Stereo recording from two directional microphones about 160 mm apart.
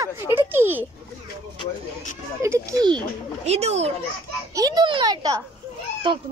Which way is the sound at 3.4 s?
40° right (ahead or behind).